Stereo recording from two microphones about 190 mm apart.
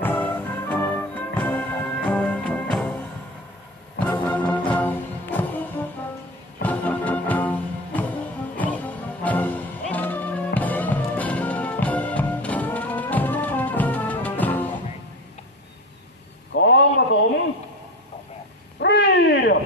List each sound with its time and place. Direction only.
0.0 s music: 10° left (ahead or behind)
4.0 s music: 10° left (ahead or behind)
16.5 s a sound: 65° left (ahead or behind)
18.8 s cat: 65° left (ahead or behind)